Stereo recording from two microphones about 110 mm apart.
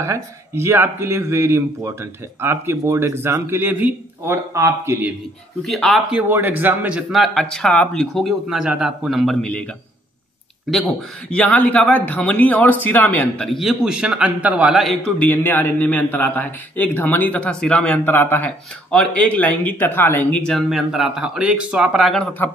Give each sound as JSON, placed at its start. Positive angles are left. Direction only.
{"t": 0.0, "sound": "speech", "side_deg": -25}
{"t": 5.6, "sound": "speech", "side_deg": 5}
{"t": 6.1, "sound": "a man's voice", "side_deg": -20}
{"t": 7.3, "sound": "speech", "side_deg": 5}
{"t": 10.7, "sound": "speech", "side_deg": 0}
{"t": 11.3, "sound": "a man's voice", "side_deg": 10}
{"t": 13.5, "sound": "a man's voice", "side_deg": 0}
{"t": 15.1, "sound": "a man's voice", "side_deg": 20}
{"t": 20.5, "sound": "speech", "side_deg": -5}